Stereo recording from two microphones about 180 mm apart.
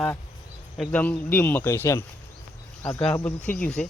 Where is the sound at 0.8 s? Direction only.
5° left (ahead or behind).